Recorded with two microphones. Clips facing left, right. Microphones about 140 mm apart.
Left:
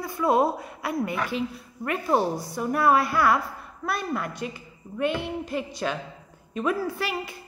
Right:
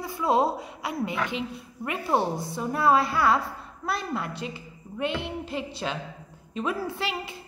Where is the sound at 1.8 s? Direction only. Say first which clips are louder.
Left 2 dB; 20° right (ahead or behind).